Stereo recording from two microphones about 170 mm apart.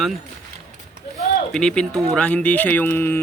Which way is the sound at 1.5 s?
5° left (ahead or behind).